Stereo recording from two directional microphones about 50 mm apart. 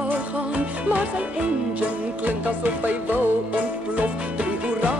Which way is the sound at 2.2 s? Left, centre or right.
Right.